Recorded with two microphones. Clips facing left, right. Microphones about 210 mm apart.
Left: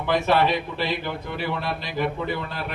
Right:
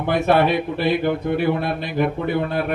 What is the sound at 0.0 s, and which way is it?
Speech, 55° right (ahead or behind).